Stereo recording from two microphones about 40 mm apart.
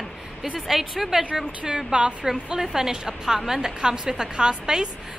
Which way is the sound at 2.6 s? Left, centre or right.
Centre.